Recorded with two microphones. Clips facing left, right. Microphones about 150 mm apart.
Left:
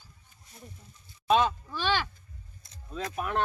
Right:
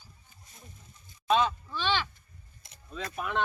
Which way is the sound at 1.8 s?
45° left (ahead or behind).